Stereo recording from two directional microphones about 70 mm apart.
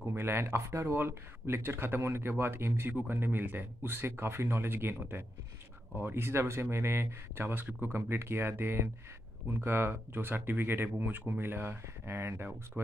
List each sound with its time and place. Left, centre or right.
0.0 s speech: right
12.7 s speech: right